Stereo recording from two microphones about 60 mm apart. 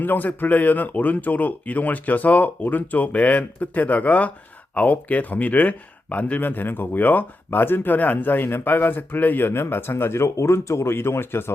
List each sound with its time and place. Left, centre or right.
0.0 s speech: left